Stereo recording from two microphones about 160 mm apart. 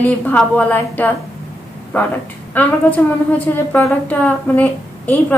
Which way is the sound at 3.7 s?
10° left (ahead or behind).